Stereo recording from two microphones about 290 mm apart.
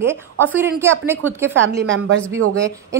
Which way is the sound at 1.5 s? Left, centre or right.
Right.